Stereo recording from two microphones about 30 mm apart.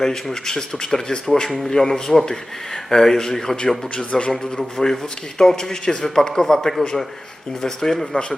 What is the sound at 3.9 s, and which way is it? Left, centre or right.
Speech, left.